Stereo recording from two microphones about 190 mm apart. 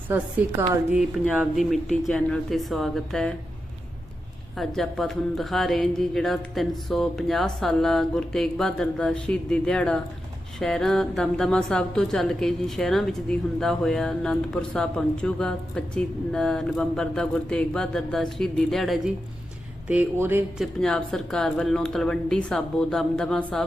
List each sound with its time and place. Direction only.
0.1 s a woman's voice: 10° right (ahead or behind)
4.5 s a woman's voice: centre (ahead or behind)
20.8 s a woman's voice: 5° left (ahead or behind)